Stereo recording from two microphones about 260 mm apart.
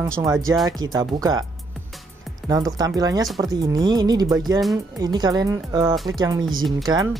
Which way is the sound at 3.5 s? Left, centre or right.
Centre.